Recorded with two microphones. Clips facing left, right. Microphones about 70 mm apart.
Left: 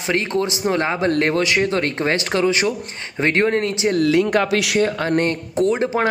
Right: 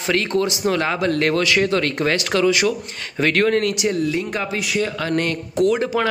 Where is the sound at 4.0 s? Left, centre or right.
Left.